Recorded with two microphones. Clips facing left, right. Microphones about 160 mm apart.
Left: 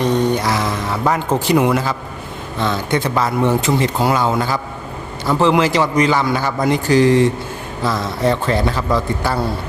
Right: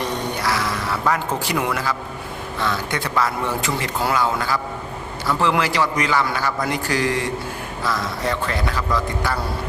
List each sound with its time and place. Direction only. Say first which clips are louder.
0.0 s mantra: left 8 dB; 20° left (ahead or behind)
1.5 s a man's voice: left 9 dB; 20° left (ahead or behind)